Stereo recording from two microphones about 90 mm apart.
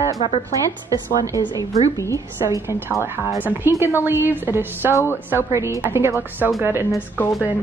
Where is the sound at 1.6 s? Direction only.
40° left (ahead or behind).